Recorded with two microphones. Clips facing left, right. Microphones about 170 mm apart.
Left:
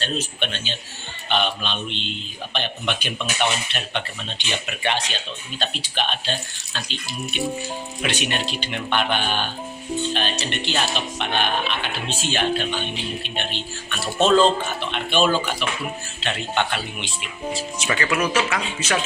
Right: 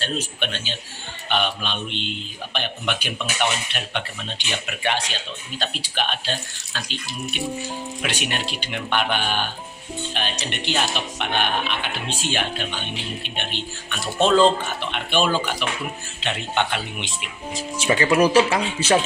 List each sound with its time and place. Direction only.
0.0 s speech: 10° right (ahead or behind)
14.0 s speech: 15° right (ahead or behind); by 18.9 s 30° right (ahead or behind)